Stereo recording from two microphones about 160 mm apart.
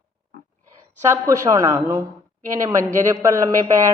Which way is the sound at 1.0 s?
20° right (ahead or behind).